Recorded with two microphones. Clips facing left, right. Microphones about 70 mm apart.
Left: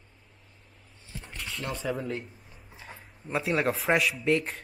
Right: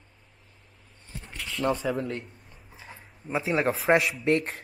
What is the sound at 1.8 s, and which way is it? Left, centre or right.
Speech, centre.